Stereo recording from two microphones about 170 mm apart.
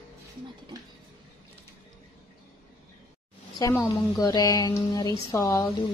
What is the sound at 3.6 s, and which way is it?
A woman's voice, 20° left (ahead or behind).